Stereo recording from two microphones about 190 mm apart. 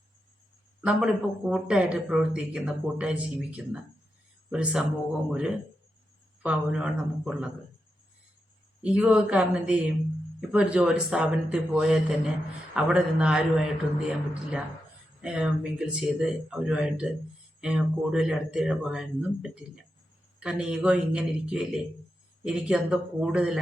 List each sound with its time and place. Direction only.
0.8 s speech: 5° right (ahead or behind)
6.4 s speech: 5° right (ahead or behind)
8.8 s speech: 5° right (ahead or behind)